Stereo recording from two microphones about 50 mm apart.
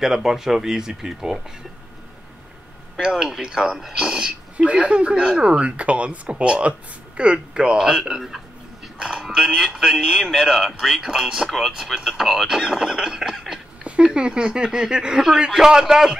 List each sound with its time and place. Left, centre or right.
0.0 s speech: centre
3.0 s speech: centre
4.6 s speech: right